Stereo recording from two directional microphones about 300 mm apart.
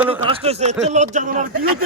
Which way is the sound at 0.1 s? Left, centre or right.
Centre.